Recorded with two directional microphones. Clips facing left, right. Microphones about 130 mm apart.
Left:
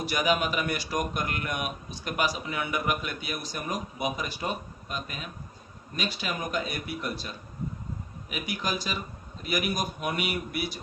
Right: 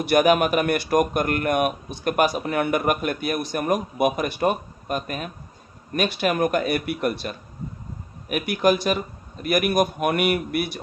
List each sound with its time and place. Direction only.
0.0 s speech: 60° right (ahead or behind)